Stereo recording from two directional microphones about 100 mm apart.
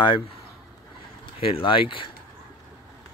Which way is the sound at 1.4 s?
65° left (ahead or behind).